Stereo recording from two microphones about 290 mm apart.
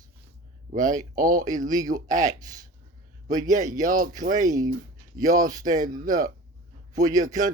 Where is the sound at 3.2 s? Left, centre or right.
Right.